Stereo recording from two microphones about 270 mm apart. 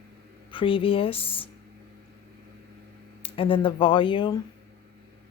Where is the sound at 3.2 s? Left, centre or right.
Centre.